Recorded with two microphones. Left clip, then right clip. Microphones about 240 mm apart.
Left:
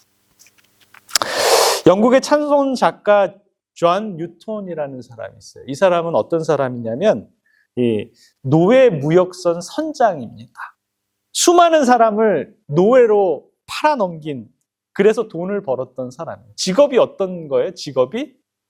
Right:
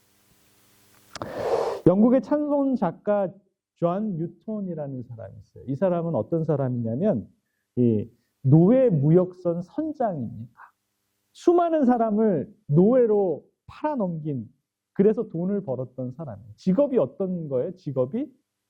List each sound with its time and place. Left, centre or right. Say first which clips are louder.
1.1 s speech: left 12 dB; centre
13.1 s speech: left 8 dB; left
13.7 s speech: left 11 dB; centre